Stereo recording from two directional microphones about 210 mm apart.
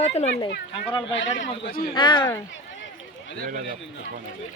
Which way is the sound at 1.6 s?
45° left (ahead or behind).